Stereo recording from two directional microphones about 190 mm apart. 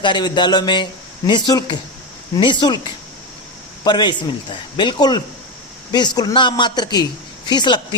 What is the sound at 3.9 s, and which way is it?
A man's voice, 25° left (ahead or behind).